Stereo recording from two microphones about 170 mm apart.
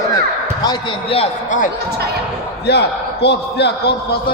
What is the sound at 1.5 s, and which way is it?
Speech, 50° left (ahead or behind).